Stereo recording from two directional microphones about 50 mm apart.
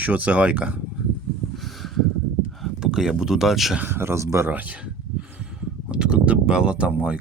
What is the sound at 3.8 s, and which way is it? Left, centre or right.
Speech, right.